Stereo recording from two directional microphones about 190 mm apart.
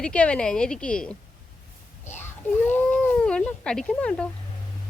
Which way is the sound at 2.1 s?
10° left (ahead or behind).